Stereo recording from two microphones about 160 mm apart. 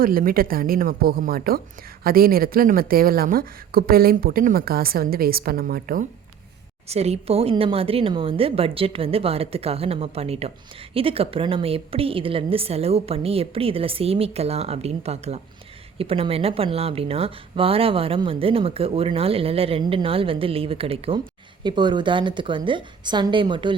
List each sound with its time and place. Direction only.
0.0 s a woman's voice: 60° right (ahead or behind)
6.8 s a woman's voice: 40° right (ahead or behind)